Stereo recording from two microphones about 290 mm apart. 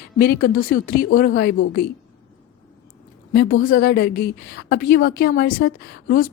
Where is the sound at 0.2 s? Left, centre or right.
Left.